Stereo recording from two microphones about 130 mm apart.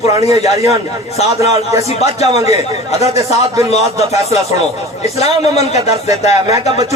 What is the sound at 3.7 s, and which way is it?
Speech, 55° left (ahead or behind).